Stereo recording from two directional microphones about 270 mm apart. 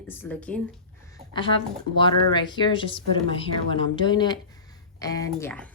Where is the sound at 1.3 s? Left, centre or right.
Centre.